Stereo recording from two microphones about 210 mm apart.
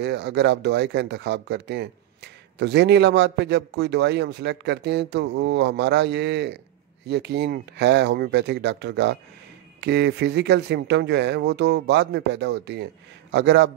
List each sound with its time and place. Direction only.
0.0 s speech: 55° right (ahead or behind)